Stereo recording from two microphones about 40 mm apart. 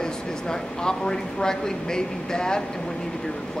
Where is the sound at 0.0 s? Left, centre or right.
Centre.